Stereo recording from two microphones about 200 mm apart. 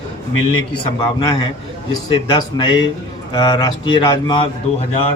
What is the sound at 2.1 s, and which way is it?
A man's voice, 25° left (ahead or behind).